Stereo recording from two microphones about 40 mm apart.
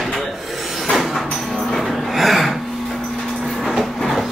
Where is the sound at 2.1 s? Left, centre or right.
Centre.